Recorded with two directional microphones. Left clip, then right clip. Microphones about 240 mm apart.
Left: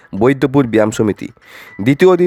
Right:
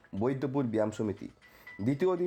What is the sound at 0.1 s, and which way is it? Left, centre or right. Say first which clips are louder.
Speech: left 19 dB; left.